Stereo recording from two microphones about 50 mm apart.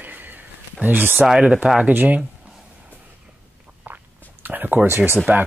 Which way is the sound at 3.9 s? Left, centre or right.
Right.